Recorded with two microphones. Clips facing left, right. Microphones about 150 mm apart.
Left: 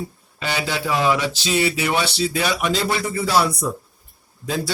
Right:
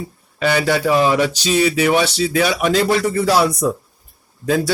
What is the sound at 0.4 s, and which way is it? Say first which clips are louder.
Speech: right 8 dB; 55° right (ahead or behind).